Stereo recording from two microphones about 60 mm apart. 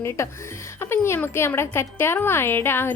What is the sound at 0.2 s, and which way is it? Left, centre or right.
Speech, left.